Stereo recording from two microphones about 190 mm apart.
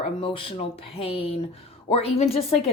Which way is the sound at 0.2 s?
30° left (ahead or behind).